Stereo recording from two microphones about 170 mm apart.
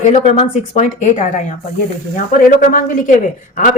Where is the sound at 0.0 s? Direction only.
45° left (ahead or behind).